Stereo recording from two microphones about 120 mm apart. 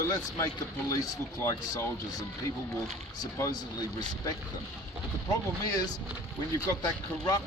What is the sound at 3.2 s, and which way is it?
Speech, 30° left (ahead or behind).